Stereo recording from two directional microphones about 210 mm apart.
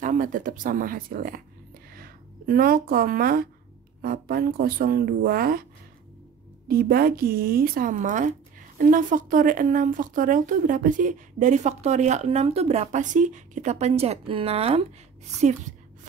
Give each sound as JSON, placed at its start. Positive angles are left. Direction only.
{"t": 0.0, "sound": "speech", "side_deg": -40}
{"t": 6.7, "sound": "speech", "side_deg": -45}
{"t": 15.4, "sound": "a sound", "side_deg": -35}